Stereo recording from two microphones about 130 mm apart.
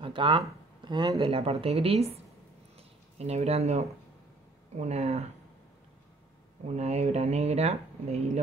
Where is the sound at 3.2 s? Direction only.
55° right (ahead or behind).